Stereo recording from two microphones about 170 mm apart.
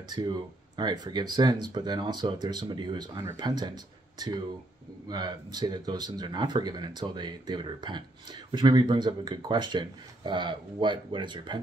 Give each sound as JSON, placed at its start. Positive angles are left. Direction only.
{"t": 0.1, "sound": "speech", "side_deg": -25}